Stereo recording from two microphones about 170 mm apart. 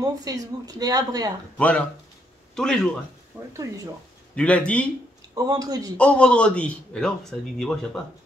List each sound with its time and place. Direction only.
0.0 s speech: 20° right (ahead or behind)
1.6 s a man's voice: 5° left (ahead or behind)
3.5 s speech: 20° right (ahead or behind)
4.4 s a man's voice: 5° left (ahead or behind)
5.3 s speech: 20° right (ahead or behind)
5.9 s a man's voice: 5° left (ahead or behind)